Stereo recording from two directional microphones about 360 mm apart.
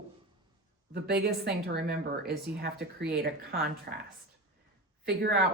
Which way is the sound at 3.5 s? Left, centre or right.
Right.